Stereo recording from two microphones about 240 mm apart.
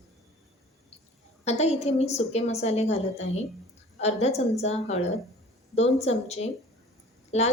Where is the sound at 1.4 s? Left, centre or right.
Left.